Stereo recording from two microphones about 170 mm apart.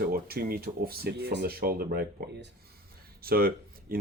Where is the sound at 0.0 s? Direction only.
65° right (ahead or behind).